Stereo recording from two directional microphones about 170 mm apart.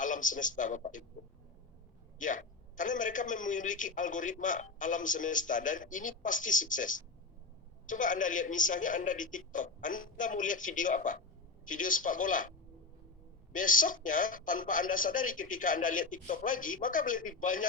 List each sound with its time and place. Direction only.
0.0 s a man's voice: 50° left (ahead or behind)
2.1 s a man's voice: 50° left (ahead or behind)